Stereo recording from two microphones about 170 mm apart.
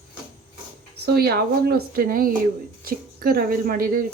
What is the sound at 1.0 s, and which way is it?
A woman's voice, 70° right (ahead or behind).